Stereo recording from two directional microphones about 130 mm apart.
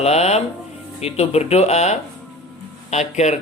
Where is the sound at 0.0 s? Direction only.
55° left (ahead or behind).